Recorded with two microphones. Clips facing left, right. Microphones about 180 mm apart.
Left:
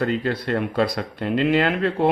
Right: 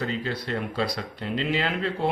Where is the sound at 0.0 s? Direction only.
55° left (ahead or behind).